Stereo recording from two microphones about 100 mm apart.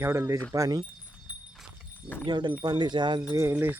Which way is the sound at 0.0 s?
25° right (ahead or behind).